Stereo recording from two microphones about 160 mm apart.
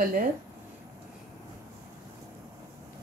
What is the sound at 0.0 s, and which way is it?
Speech, 65° right (ahead or behind).